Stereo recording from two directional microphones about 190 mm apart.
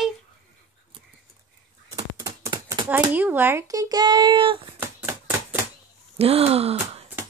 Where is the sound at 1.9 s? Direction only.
20° right (ahead or behind).